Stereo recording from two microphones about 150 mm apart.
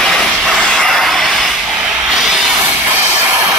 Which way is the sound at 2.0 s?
Centre (ahead or behind).